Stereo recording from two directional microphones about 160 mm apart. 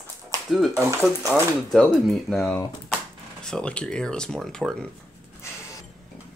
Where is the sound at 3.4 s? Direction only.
5° left (ahead or behind).